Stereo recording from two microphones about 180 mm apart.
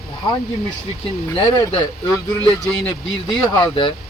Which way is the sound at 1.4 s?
25° left (ahead or behind).